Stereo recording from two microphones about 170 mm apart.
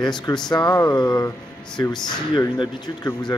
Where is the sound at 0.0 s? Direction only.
25° left (ahead or behind).